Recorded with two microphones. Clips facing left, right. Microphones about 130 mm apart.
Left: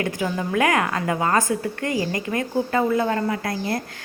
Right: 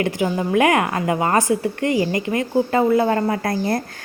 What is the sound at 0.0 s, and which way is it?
A woman's voice, 20° right (ahead or behind).